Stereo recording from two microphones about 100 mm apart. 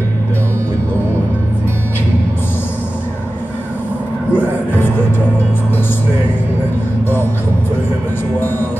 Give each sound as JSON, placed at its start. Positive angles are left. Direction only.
{"t": 4.4, "sound": "music", "side_deg": 20}